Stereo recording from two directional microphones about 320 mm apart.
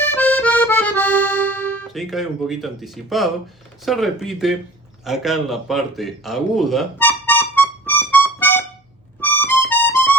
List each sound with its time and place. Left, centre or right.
0.0 s accordion: centre
3.8 s speech: centre
5.0 s a sound: centre
9.2 s music: centre